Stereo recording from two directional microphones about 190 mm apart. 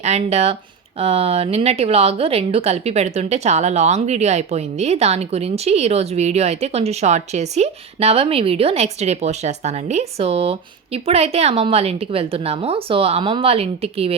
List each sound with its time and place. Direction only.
0.0 s a woman's voice: 35° right (ahead or behind)